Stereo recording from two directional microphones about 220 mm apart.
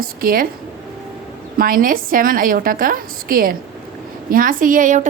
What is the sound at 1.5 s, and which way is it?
A woman's voice, 40° right (ahead or behind).